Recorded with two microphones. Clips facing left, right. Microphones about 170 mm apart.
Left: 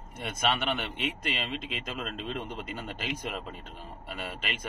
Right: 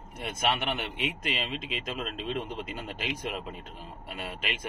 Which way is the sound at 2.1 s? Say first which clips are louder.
Right 2 dB; 50° left (ahead or behind).